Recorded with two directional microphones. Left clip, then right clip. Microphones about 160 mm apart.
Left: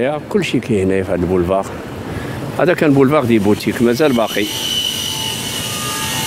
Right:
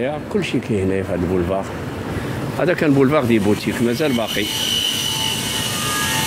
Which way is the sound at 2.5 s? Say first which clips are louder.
Left 4 dB; 55° left (ahead or behind).